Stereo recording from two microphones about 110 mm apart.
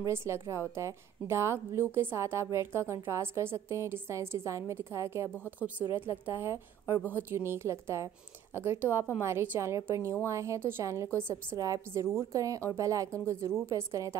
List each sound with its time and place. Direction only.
0.0 s a woman's voice: 25° right (ahead or behind)
5.3 s speech: 15° left (ahead or behind)
5.9 s a woman's voice: 20° right (ahead or behind)